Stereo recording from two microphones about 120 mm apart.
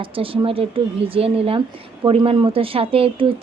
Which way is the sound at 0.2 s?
50° right (ahead or behind).